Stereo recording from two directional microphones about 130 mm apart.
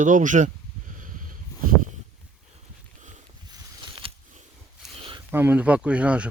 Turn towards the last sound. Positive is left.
turn(degrees=-10)  # may be behind; listen again after turning